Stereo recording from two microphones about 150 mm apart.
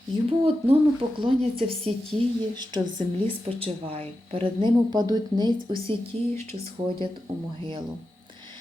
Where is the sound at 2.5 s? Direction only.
30° right (ahead or behind).